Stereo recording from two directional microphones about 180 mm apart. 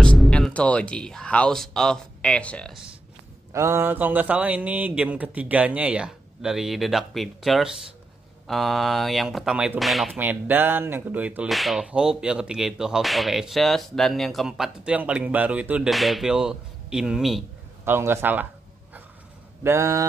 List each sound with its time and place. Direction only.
0.0 s speech: 5° left (ahead or behind)
3.5 s speech: 15° right (ahead or behind)
17.8 s speech: 15° right (ahead or behind)
19.6 s speech: 15° right (ahead or behind)